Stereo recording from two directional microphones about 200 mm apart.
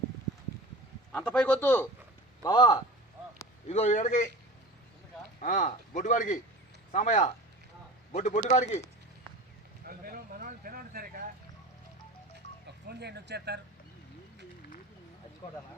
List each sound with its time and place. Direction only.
1.1 s a man's voice: 5° left (ahead or behind)
2.4 s a man's voice: 20° left (ahead or behind)
3.7 s speech: 35° left (ahead or behind)
5.4 s speech: 35° left (ahead or behind)
9.8 s a sound: 45° right (ahead or behind)
12.9 s speech: 55° right (ahead or behind)